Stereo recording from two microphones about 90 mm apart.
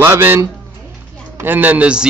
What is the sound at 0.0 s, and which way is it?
A man's voice, 25° right (ahead or behind).